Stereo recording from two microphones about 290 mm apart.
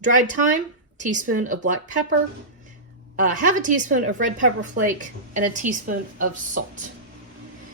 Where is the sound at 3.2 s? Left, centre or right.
Right.